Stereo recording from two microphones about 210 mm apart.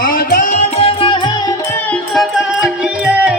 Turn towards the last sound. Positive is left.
turn(degrees=-5)  # may be behind; listen again after turning